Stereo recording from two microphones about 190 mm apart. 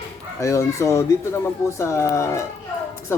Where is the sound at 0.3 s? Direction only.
15° left (ahead or behind).